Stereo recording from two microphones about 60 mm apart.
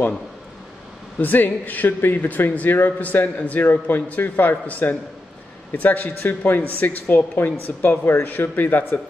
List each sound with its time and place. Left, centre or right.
1.2 s a man's voice: left